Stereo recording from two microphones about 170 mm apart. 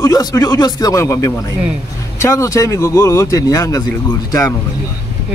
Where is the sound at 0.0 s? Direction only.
20° left (ahead or behind).